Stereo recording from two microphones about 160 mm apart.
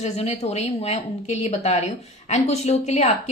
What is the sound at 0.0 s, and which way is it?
A woman's voice, 45° left (ahead or behind).